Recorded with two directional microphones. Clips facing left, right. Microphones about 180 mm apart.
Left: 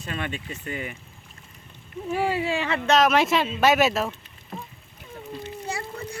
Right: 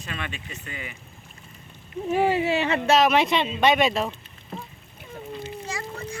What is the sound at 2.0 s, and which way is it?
Speech, 20° right (ahead or behind).